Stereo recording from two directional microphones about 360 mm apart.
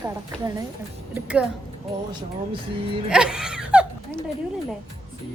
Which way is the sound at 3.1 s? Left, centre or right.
Centre.